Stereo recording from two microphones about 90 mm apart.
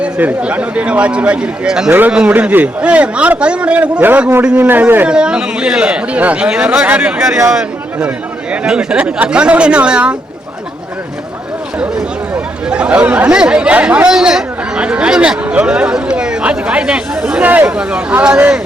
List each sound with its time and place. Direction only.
0.0 s speech: 15° right (ahead or behind)
1.9 s a man's voice: 20° right (ahead or behind)
5.0 s a man's voice: 10° right (ahead or behind)
12.6 s speech: 10° right (ahead or behind)
17.4 s speech: 20° right (ahead or behind)